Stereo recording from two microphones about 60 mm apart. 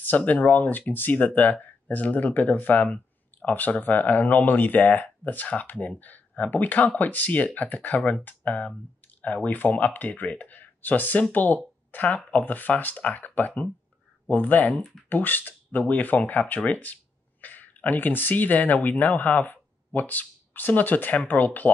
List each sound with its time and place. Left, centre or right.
0.0 s speech: left